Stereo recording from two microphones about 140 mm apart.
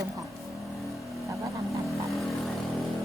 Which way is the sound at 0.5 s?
Centre (ahead or behind).